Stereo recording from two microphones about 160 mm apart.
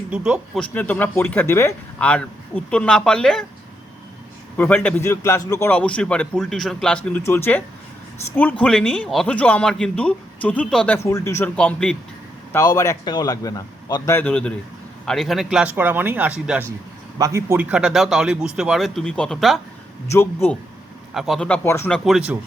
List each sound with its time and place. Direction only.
0.1 s a man's voice: 5° right (ahead or behind)
0.6 s a man's voice: 10° left (ahead or behind)
4.5 s a man's voice: 10° left (ahead or behind)
11.5 s a man's voice: 5° left (ahead or behind)
12.5 s a man's voice: 20° left (ahead or behind); by 16.6 s 10° right (ahead or behind)
17.2 s a man's voice: 20° right (ahead or behind); by 19.5 s centre (ahead or behind)
20.1 s a man's voice: 15° left (ahead or behind)
21.1 s a man's voice: centre (ahead or behind)